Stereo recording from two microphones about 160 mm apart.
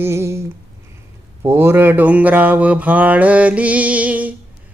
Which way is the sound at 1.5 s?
15° right (ahead or behind).